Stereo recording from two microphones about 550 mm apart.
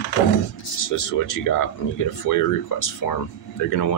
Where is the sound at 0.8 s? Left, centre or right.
Left.